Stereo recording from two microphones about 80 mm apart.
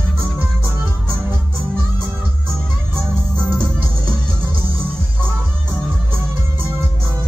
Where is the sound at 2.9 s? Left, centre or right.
Right.